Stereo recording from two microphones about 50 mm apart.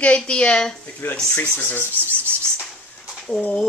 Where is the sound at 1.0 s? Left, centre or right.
Left.